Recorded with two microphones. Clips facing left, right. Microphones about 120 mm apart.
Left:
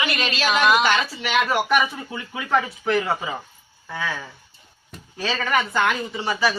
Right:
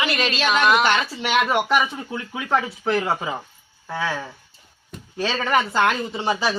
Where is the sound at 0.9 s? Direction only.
25° right (ahead or behind).